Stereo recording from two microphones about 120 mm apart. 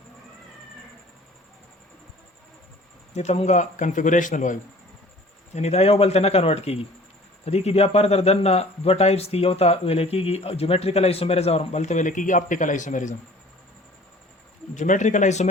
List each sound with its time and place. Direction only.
3.2 s speech: 70° left (ahead or behind); by 4.6 s 90° left
5.5 s speech: 65° left (ahead or behind); by 13.1 s 90° left
14.8 s speech: 90° left